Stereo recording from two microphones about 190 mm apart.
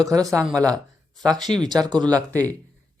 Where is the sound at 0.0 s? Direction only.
20° right (ahead or behind).